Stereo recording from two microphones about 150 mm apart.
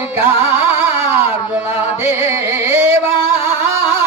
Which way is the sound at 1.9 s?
15° right (ahead or behind).